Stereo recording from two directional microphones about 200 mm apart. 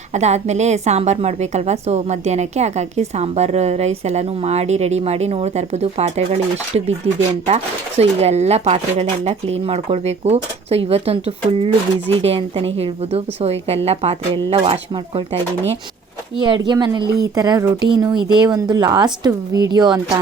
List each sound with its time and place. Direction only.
0.1 s a woman's voice: 35° right (ahead or behind)
16.4 s a woman's voice: 20° right (ahead or behind)